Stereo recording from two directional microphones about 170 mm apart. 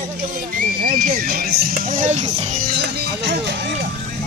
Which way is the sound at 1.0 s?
60° right (ahead or behind).